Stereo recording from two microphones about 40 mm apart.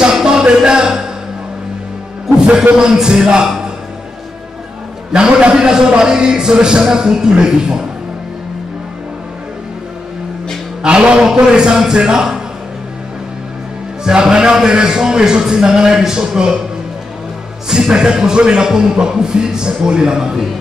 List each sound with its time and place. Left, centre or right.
0.1 s music: centre
2.3 s a man's voice: centre
3.4 s a sound: centre
5.1 s a man's voice: right
10.8 s a man's voice: right
14.2 s a man's voice: centre
17.6 s a man's voice: centre